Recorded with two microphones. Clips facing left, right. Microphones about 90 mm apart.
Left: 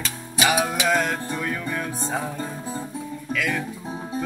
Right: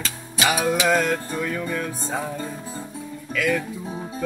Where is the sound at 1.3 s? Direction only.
5° left (ahead or behind).